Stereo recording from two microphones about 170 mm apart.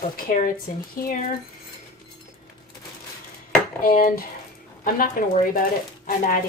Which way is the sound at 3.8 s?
55° left (ahead or behind).